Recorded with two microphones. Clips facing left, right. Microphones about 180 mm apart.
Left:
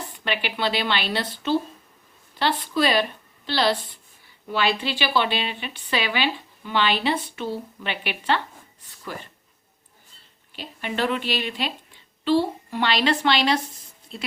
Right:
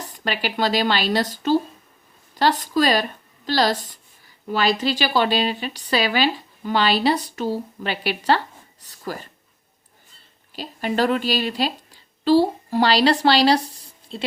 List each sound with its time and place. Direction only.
0.0 s speech: 40° right (ahead or behind)
10.5 s speech: 40° right (ahead or behind)